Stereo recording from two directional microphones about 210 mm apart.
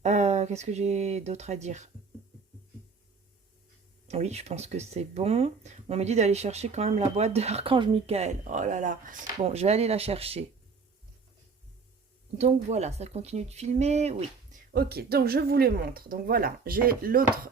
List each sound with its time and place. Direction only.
0.0 s speech: 35° right (ahead or behind)
4.1 s speech: 30° right (ahead or behind)
12.4 s speech: 30° right (ahead or behind)
14.7 s speech: 50° right (ahead or behind)